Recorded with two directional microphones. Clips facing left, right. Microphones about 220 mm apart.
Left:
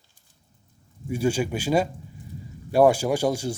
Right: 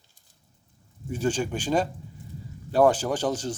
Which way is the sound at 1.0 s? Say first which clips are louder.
Left 3 dB; 10° left (ahead or behind).